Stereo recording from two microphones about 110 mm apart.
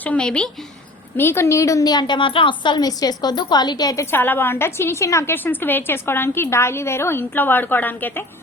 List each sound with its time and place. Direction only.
0.0 s a woman's voice: 10° left (ahead or behind)
1.1 s a woman's voice: 20° left (ahead or behind)